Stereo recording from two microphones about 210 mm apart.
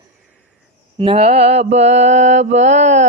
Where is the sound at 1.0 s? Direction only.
30° right (ahead or behind).